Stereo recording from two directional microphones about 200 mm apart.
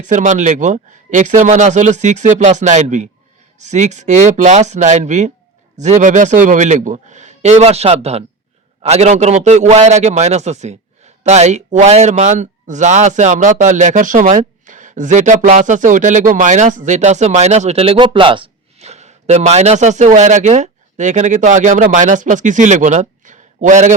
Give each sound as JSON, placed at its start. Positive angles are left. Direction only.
{"t": 0.0, "sound": "a man's voice", "side_deg": -40}